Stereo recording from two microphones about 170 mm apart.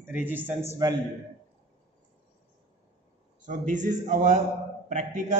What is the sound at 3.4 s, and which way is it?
A man's voice, 45° right (ahead or behind).